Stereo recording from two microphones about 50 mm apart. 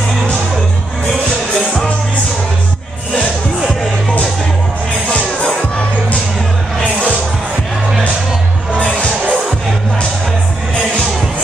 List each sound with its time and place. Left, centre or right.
5.0 s music: left
6.8 s music: left
8.7 s music: left